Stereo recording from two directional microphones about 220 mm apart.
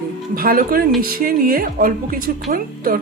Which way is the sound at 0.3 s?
40° right (ahead or behind).